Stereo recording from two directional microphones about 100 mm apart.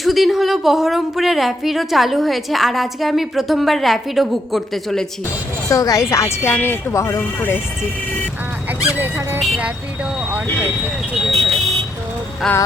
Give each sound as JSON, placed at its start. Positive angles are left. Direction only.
{"t": 0.0, "sound": "a woman's voice", "side_deg": 0}
{"t": 5.6, "sound": "a woman's voice", "side_deg": 35}
{"t": 9.0, "sound": "music", "side_deg": -20}
{"t": 9.6, "sound": "a sound", "side_deg": -10}
{"t": 11.3, "sound": "vehicle", "side_deg": 0}
{"t": 12.4, "sound": "a woman's voice", "side_deg": 5}